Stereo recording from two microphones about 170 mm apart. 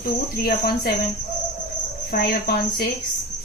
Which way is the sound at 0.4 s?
60° left (ahead or behind).